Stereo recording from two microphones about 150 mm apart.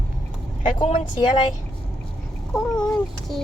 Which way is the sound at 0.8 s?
35° left (ahead or behind).